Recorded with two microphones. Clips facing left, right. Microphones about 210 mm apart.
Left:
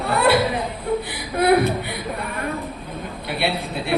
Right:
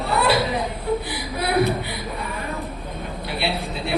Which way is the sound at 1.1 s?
55° left (ahead or behind).